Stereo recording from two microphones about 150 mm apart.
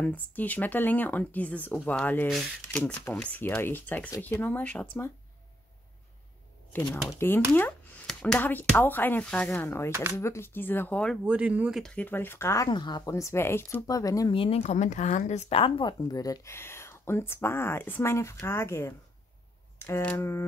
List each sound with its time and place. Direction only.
0.0 s speech: 10° left (ahead or behind)
6.7 s speech: 10° left (ahead or behind)
11.2 s speech: 10° right (ahead or behind)
11.8 s speech: 10° left (ahead or behind)
12.6 s speech: 30° left (ahead or behind)
14.3 s speech: 40° left (ahead or behind); by 20.4 s 15° left (ahead or behind)